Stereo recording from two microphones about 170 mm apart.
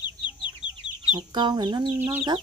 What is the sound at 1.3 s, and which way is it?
Speech, 25° right (ahead or behind).